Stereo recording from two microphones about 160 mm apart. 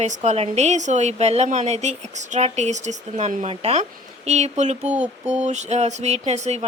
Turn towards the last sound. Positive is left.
turn(degrees=-45)  # may be behind; listen again after turning